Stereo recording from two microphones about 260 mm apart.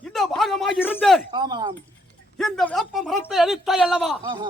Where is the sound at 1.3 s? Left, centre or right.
Centre.